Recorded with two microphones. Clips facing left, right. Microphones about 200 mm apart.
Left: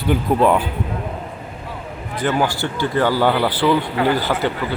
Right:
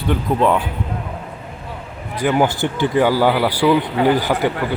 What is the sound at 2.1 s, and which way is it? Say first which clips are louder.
Speech: right 3 dB; 15° right (ahead or behind).